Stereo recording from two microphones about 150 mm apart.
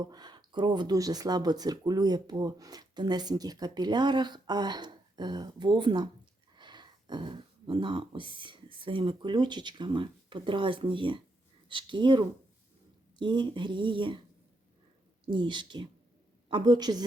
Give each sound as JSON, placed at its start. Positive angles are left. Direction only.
{"t": 0.0, "sound": "speech", "side_deg": -25}
{"t": 15.3, "sound": "speech", "side_deg": -30}